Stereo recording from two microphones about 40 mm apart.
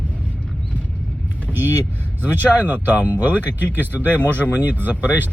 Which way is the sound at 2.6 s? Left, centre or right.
Right.